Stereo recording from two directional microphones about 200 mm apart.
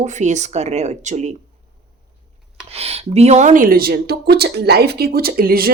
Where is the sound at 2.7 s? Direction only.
30° right (ahead or behind).